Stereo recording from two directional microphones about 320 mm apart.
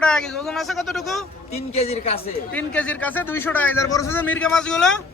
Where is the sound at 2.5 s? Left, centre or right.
Centre.